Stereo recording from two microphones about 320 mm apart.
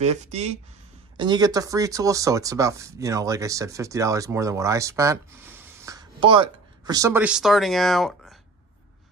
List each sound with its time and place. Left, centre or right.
0.0 s speech: right; by 8.4 s centre